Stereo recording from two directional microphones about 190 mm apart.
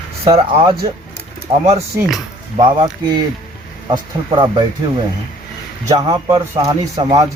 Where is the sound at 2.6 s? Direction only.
20° right (ahead or behind).